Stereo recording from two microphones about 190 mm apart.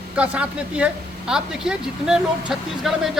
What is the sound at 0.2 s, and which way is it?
Speech, 5° right (ahead or behind).